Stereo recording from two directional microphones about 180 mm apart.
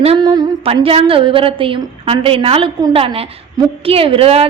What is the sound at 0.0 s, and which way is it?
A woman's voice, 30° right (ahead or behind).